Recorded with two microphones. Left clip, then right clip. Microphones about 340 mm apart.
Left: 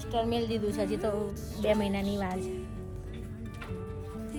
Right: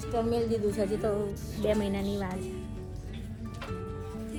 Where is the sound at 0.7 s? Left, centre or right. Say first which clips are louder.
Right 2 dB; left.